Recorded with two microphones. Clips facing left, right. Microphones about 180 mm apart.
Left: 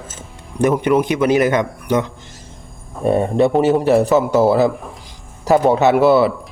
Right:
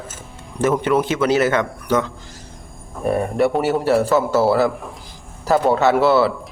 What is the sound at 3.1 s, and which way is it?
A man's voice, 25° left (ahead or behind).